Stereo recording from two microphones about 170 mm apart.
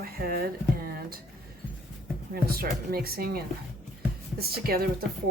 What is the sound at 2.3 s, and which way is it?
Speech, 65° right (ahead or behind).